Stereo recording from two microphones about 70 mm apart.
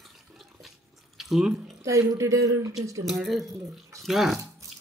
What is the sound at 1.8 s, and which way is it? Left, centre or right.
Speech, right.